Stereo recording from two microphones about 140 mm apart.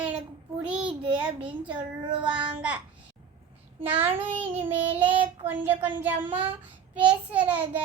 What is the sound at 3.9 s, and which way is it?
Speech, 15° right (ahead or behind).